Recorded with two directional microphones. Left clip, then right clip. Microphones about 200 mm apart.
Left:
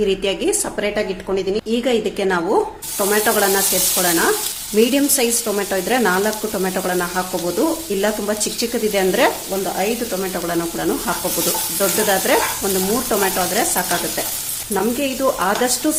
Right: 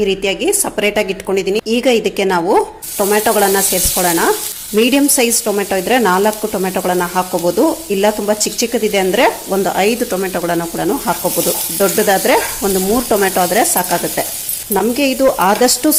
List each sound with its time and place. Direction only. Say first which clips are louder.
0.0 s a woman's voice: right 3 dB; 20° right (ahead or behind)
3.9 s sizzle: right 4 dB; 35° right (ahead or behind)
4.9 s a woman's voice: right 5 dB; 30° right (ahead or behind)
9.7 s sizzle: right 6 dB; 35° right (ahead or behind)